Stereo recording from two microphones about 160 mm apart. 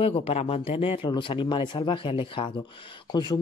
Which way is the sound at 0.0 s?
35° left (ahead or behind).